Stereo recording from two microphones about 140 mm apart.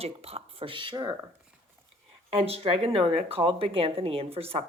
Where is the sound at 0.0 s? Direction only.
45° right (ahead or behind).